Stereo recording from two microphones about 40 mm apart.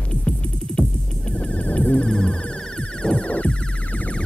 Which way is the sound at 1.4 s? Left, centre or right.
Left.